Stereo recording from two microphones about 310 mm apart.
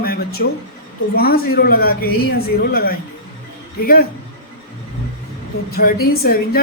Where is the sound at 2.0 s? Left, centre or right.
Left.